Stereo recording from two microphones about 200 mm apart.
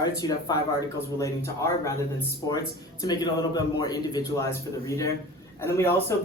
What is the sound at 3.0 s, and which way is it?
A man's voice, 20° left (ahead or behind).